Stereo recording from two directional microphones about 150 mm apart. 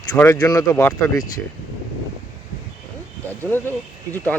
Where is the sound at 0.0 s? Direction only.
20° left (ahead or behind).